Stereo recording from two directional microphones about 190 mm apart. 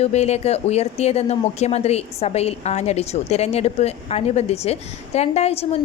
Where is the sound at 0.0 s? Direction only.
35° left (ahead or behind).